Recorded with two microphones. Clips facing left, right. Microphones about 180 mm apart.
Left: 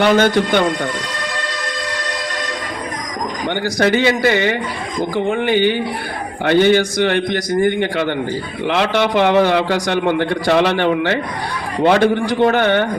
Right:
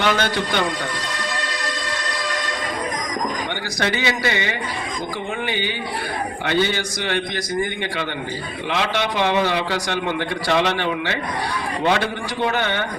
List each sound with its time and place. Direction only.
0.0 s a man's voice: 45° left (ahead or behind)
3.8 s a man's voice: 50° left (ahead or behind)